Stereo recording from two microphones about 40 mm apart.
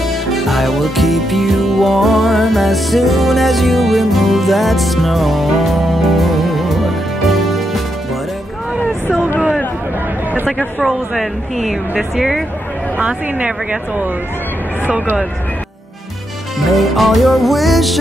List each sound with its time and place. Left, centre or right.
0.0 s music: centre
10.8 s music: centre
12.9 s speech: right
14.9 s speech: right
16.5 s music: centre